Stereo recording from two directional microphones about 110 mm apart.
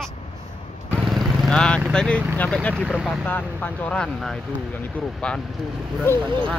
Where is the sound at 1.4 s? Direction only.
5° left (ahead or behind).